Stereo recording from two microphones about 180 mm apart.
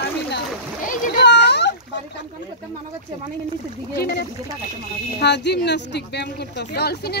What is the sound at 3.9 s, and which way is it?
Speech, 65° left (ahead or behind).